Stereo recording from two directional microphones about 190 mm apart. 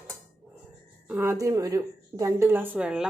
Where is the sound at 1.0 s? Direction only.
10° right (ahead or behind).